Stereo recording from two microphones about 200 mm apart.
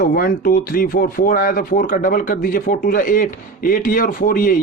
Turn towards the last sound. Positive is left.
turn(degrees=45)  # may be behind; listen again after turning